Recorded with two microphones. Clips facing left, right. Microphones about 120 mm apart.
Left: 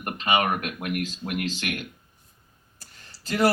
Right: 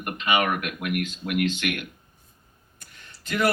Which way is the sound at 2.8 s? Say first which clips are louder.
Right 1 dB; 35° left (ahead or behind).